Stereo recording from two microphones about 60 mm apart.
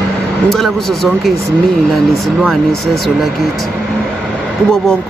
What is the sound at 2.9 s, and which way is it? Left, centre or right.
Speech, centre.